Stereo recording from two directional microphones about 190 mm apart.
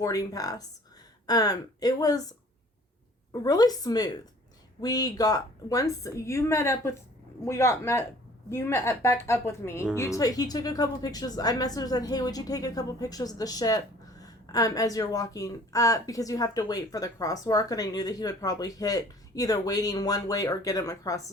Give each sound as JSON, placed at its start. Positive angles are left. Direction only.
{"t": 0.0, "sound": "speech", "side_deg": 20}
{"t": 3.4, "sound": "a woman's voice", "side_deg": 20}